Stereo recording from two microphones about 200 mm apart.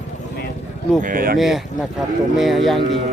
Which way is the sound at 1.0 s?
45° right (ahead or behind).